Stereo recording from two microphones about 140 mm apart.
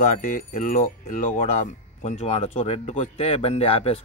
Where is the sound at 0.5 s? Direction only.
65° left (ahead or behind).